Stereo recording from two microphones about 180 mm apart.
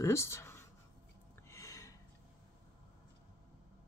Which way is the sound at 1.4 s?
15° left (ahead or behind).